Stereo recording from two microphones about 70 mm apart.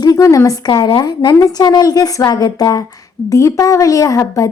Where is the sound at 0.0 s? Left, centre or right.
Left.